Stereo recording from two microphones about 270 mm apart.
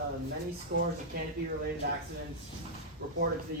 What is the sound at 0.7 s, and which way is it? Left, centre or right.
Speech, right.